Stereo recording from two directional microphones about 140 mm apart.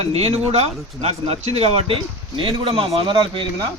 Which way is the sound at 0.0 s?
45° right (ahead or behind).